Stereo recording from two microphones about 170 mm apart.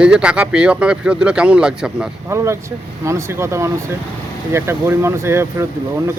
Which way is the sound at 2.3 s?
15° right (ahead or behind).